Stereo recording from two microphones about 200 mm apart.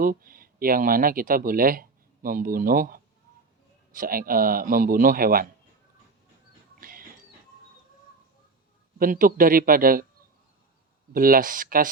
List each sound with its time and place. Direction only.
0.0 s a man's voice: 45° right (ahead or behind)
6.7 s music: 45° right (ahead or behind)
9.0 s a man's voice: 45° right (ahead or behind)
11.1 s a man's voice: 45° right (ahead or behind)